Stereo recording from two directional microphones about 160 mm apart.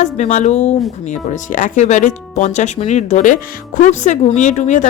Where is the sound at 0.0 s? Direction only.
45° left (ahead or behind).